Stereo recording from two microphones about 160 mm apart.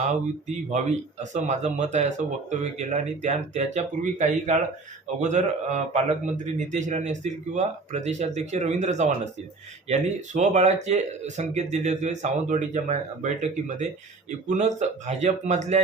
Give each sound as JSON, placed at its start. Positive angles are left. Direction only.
{"t": 1.2, "sound": "a man's voice", "side_deg": -50}